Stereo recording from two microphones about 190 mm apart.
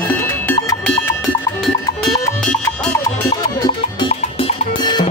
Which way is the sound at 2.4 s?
5° left (ahead or behind).